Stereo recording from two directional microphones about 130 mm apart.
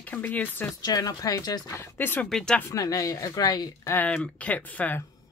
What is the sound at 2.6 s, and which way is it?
Speech, 25° left (ahead or behind).